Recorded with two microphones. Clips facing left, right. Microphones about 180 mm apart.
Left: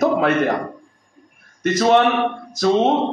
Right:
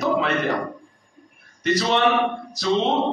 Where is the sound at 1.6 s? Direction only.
50° left (ahead or behind).